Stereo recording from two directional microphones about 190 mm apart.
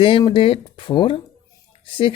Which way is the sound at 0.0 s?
25° left (ahead or behind).